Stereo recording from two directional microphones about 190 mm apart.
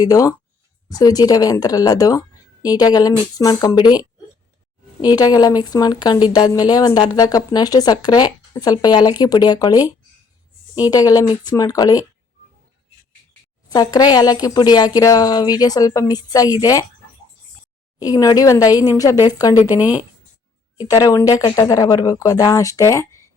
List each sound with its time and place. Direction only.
0.0 s speech: 20° left (ahead or behind)
13.7 s speech: 20° left (ahead or behind)
18.0 s speech: 20° left (ahead or behind)
19.8 s a woman's voice: 10° right (ahead or behind)
20.7 s speech: 20° left (ahead or behind)